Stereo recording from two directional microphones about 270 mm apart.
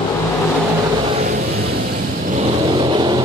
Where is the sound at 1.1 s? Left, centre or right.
Right.